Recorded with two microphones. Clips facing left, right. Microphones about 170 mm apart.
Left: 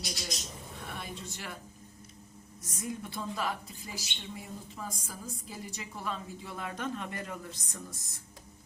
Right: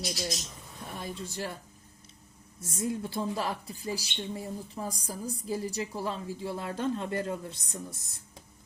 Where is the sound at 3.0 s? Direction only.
30° right (ahead or behind).